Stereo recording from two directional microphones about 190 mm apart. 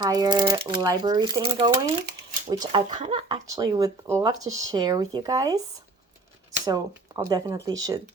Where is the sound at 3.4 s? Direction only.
20° right (ahead or behind).